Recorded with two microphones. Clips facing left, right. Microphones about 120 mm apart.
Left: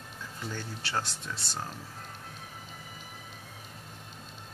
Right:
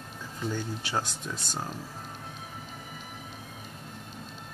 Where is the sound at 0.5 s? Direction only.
15° right (ahead or behind).